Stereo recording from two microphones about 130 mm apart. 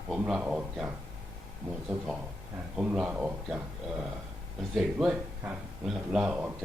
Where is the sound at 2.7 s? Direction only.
10° right (ahead or behind).